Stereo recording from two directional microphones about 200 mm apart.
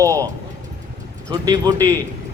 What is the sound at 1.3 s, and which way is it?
Speech, 20° right (ahead or behind).